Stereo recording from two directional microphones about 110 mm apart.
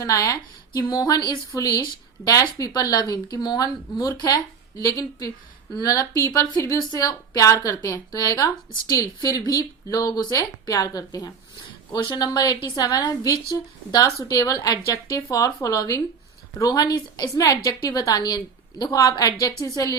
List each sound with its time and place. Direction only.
0.0 s a woman's voice: 30° left (ahead or behind)
11.9 s a woman's voice: 45° left (ahead or behind)